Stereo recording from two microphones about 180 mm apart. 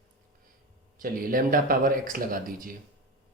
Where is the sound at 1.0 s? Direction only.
50° right (ahead or behind).